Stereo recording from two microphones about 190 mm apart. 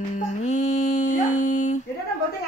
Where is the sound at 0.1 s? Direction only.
35° left (ahead or behind).